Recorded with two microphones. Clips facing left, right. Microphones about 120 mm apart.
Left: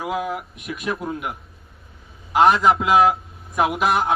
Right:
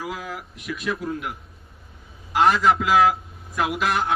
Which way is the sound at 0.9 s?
60° left (ahead or behind).